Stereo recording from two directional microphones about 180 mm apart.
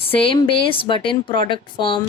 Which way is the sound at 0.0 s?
30° left (ahead or behind).